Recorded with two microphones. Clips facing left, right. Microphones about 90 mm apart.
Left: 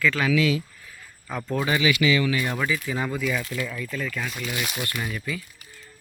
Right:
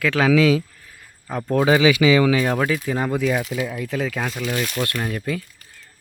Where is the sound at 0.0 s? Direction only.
70° right (ahead or behind).